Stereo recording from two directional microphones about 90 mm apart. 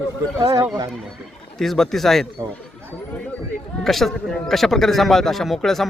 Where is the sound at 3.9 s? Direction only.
Centre (ahead or behind).